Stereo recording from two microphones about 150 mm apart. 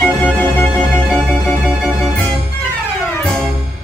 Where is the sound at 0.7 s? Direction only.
5° left (ahead or behind).